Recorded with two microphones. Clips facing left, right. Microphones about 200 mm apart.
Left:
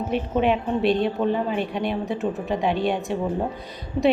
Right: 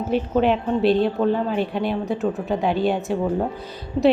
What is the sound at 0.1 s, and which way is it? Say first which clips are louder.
A woman's voice: right 3 dB; centre (ahead or behind).